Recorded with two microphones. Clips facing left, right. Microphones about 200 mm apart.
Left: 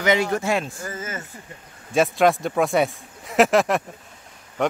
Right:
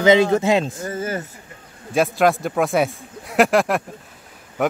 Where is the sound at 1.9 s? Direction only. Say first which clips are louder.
Right 1 dB; centre (ahead or behind).